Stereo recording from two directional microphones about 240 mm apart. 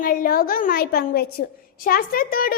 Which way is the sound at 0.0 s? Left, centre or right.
Left.